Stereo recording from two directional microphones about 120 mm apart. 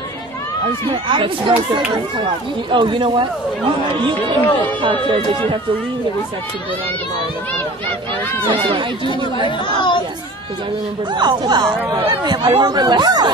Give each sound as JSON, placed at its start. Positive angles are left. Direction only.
{"t": 1.0, "sound": "speech", "side_deg": -45}
{"t": 4.2, "sound": "speech", "side_deg": 15}
{"t": 4.8, "sound": "speech", "side_deg": -45}
{"t": 8.5, "sound": "speech", "side_deg": -45}
{"t": 11.1, "sound": "speech", "side_deg": -35}